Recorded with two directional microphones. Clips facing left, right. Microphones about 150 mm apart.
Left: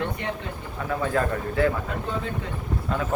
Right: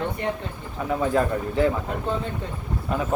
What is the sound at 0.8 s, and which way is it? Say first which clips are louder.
Speech: right 3 dB; 15° right (ahead or behind).